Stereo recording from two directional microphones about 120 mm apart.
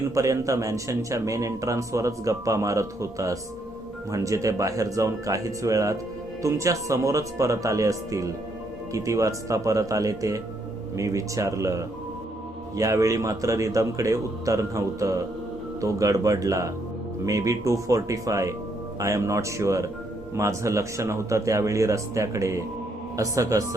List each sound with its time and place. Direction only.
0.1 s a man's voice: 25° right (ahead or behind)